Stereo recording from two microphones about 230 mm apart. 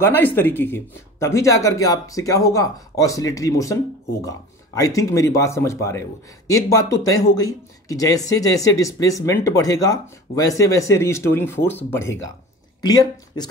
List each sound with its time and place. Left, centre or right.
0.0 s speech: centre